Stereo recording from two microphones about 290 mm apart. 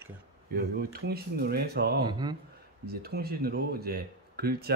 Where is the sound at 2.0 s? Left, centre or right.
Centre.